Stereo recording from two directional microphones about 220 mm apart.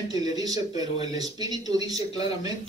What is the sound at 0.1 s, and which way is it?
A man's voice, 15° right (ahead or behind).